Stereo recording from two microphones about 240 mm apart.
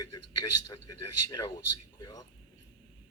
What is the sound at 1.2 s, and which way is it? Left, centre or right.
Speech, centre.